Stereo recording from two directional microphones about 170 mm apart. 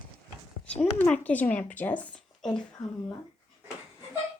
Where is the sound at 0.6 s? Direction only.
5° left (ahead or behind).